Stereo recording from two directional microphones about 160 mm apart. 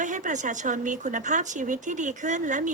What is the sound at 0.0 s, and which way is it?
Speech, 50° right (ahead or behind).